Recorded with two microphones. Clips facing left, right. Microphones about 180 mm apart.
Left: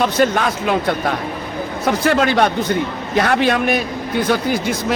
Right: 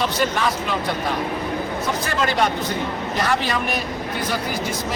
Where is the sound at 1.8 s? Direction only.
70° left (ahead or behind).